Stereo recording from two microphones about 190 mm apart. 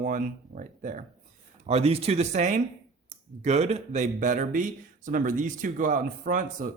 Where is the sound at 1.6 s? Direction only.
35° right (ahead or behind).